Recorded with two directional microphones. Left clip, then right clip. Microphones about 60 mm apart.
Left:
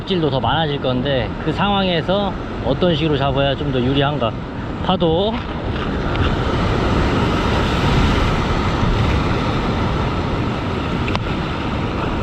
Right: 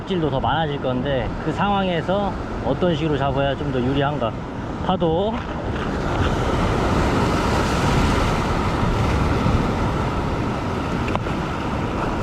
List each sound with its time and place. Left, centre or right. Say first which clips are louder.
0.1 s speech: left 3 dB; right
6.1 s vehicle: left 1 dB; right